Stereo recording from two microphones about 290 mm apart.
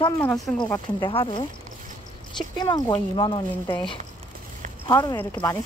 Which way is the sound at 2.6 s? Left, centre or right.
Centre.